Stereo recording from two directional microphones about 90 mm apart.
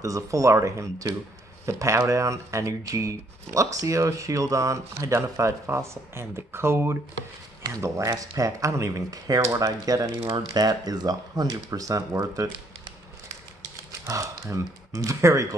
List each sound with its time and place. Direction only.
0.0 s speech: 35° right (ahead or behind)
14.0 s speech: 40° right (ahead or behind)